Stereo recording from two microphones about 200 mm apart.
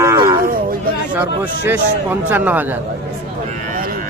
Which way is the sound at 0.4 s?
45° right (ahead or behind).